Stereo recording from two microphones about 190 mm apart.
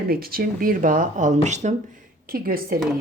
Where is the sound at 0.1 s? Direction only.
50° right (ahead or behind).